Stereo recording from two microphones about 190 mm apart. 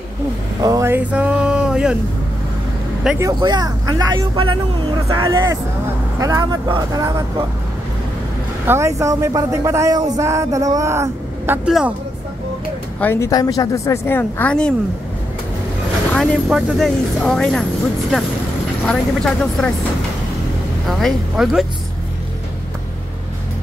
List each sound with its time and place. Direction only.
0.6 s a sound: 15° right (ahead or behind)
3.2 s speech: 20° right (ahead or behind)
8.6 s speech: 15° right (ahead or behind)
13.0 s a woman's voice: 15° left (ahead or behind)
16.1 s speech: centre (ahead or behind)
18.9 s speech: 5° left (ahead or behind)
21.0 s speech: centre (ahead or behind)